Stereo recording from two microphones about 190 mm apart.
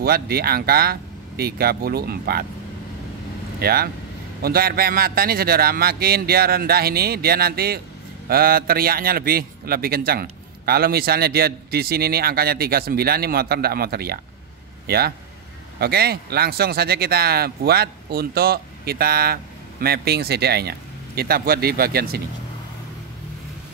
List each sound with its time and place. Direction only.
0.0 s a man's voice: 55° right (ahead or behind)
3.5 s a man's voice: 55° right (ahead or behind)